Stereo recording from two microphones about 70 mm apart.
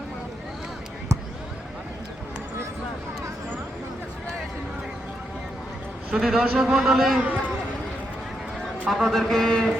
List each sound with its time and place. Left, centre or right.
6.1 s a man's voice: centre
7.2 s speech: centre
8.9 s a man's voice: centre